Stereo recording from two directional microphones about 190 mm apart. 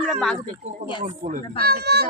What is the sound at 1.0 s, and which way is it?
Speech, 40° right (ahead or behind).